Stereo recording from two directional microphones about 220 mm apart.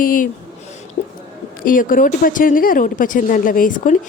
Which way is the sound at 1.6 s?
40° left (ahead or behind).